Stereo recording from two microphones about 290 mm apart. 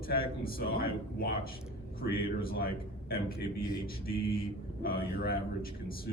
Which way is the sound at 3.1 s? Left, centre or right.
Left.